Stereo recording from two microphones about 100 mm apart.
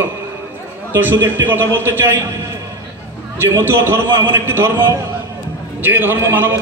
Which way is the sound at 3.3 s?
25° right (ahead or behind).